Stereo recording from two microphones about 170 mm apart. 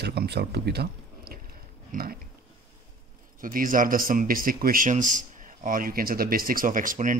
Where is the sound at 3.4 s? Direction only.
55° right (ahead or behind).